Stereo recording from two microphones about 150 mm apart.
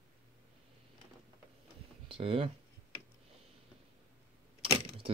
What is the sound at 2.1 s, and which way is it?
Speech, 35° right (ahead or behind).